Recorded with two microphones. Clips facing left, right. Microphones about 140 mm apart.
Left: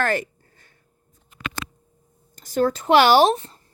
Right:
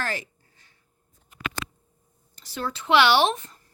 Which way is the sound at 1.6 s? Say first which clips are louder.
Left 1 dB; 35° left (ahead or behind).